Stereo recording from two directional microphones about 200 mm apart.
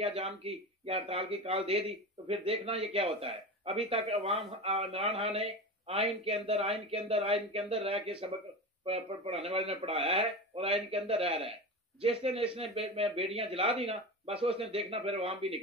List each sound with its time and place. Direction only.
0.0 s a man's voice: 30° right (ahead or behind)